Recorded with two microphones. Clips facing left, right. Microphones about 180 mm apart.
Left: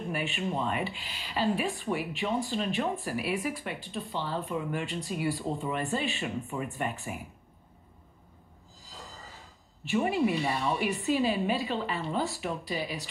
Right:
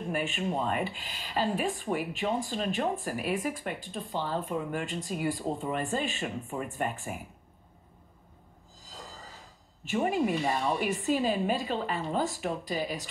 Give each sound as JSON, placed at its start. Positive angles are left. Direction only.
{"t": 0.1, "sound": "speech", "side_deg": -45}
{"t": 9.8, "sound": "speech", "side_deg": -45}